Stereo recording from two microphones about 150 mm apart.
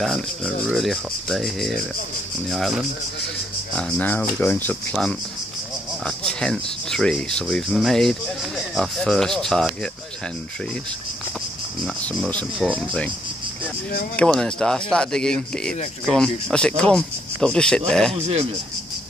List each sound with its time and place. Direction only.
0.7 s speech: centre (ahead or behind)
6.0 s speech: 5° left (ahead or behind)
11.8 s speech: 5° left (ahead or behind)
14.1 s speech: 5° left (ahead or behind)
18.1 s speech: 40° right (ahead or behind)